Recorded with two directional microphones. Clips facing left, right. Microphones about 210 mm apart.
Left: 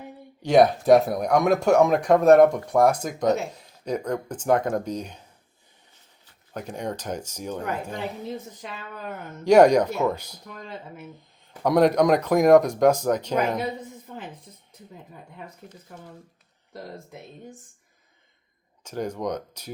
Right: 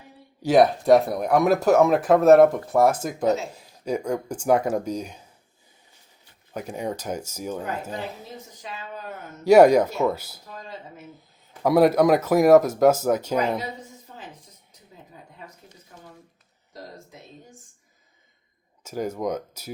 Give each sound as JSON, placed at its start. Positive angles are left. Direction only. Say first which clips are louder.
{"t": 0.4, "sound": "speech", "louder": "even", "side_deg": 0}
{"t": 6.5, "sound": "speech", "louder": "right 1 dB", "side_deg": -10}
{"t": 9.4, "sound": "speech", "louder": "right 1 dB", "side_deg": -5}
{"t": 10.5, "sound": "speech", "louder": "left 1 dB", "side_deg": 55}
{"t": 11.6, "sound": "speech", "louder": "right 1 dB", "side_deg": -5}
{"t": 18.8, "sound": "speech", "louder": "right 1 dB", "side_deg": -5}